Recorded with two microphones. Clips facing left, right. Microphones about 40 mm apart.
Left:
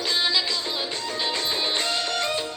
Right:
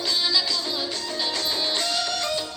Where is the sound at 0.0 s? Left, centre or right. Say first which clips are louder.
Left 1 dB; left.